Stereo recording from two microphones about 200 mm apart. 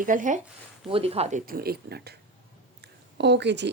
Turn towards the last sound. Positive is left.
turn(degrees=-60)  # may be behind; listen again after turning